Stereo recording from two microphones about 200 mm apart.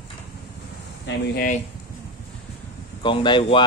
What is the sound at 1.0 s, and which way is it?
Speech, 50° left (ahead or behind).